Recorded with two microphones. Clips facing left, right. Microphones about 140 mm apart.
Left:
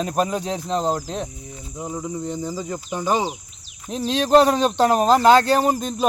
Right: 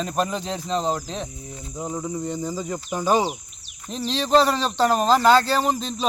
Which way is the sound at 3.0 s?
15° left (ahead or behind).